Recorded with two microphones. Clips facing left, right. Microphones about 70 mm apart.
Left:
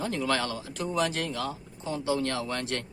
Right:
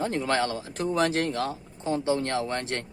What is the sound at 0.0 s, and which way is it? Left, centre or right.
Speech, right.